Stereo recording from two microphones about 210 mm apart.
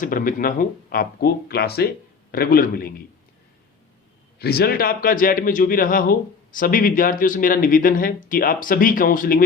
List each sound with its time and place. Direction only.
0.0 s speech: 40° left (ahead or behind)
4.4 s a man's voice: 50° left (ahead or behind)